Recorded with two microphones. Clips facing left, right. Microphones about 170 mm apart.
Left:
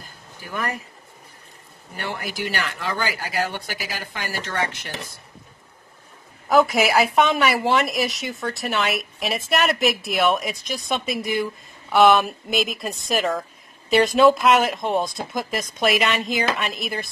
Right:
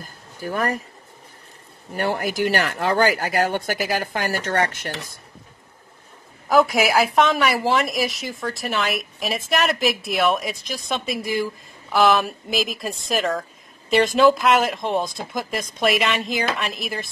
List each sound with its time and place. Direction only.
0.4 s speech: 40° right (ahead or behind)
2.0 s speech: 45° right (ahead or behind)
6.5 s a woman's voice: centre (ahead or behind)